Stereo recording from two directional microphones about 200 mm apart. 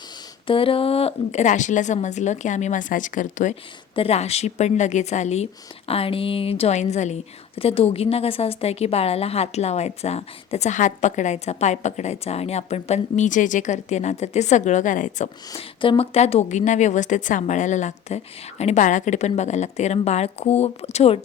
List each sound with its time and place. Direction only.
0.4 s a woman's voice: 25° left (ahead or behind)
15.8 s a woman's voice: 25° left (ahead or behind)